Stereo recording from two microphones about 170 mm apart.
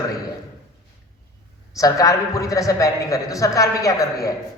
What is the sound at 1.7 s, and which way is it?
A man's voice, 20° left (ahead or behind).